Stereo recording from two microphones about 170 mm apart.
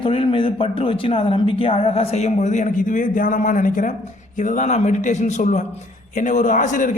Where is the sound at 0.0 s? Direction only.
30° left (ahead or behind).